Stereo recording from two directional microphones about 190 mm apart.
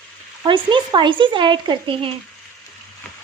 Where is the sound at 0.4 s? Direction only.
25° right (ahead or behind).